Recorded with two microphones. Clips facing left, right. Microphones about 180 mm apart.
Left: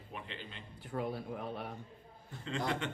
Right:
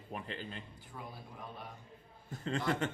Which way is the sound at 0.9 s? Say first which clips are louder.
Left 14 dB; 60° left (ahead or behind).